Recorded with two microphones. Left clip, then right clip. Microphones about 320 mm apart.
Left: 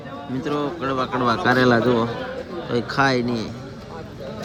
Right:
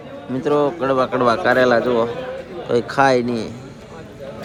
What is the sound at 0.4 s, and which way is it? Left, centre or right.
A man's voice, centre.